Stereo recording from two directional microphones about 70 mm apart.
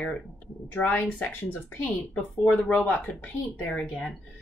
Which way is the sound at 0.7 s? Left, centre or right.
Left.